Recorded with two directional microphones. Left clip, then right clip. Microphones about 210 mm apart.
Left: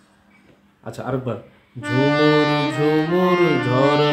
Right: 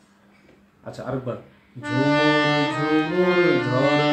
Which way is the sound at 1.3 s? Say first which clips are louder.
Left 3 dB; 50° left (ahead or behind).